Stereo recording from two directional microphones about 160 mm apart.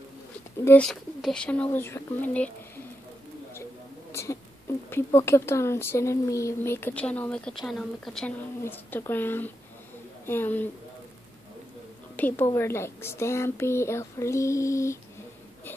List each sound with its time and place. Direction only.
0.7 s speech: 5° left (ahead or behind)
4.1 s a sound: 15° left (ahead or behind)
4.8 s speech: 15° left (ahead or behind)
12.2 s speech: 15° left (ahead or behind)